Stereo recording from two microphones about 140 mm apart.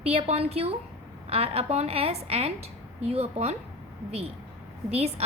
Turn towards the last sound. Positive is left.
turn(degrees=-45)  # may be behind; listen again after turning